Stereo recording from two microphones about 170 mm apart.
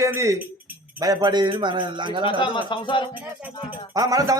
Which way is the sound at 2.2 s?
30° left (ahead or behind).